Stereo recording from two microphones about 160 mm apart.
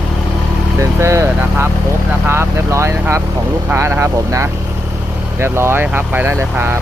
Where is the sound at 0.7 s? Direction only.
20° right (ahead or behind).